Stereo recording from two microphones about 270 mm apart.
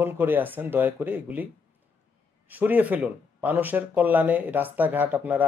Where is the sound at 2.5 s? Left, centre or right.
Centre.